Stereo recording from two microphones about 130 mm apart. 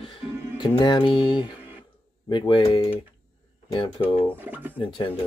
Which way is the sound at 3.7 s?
40° left (ahead or behind).